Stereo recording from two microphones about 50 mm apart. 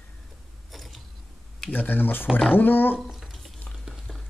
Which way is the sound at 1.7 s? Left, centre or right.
Left.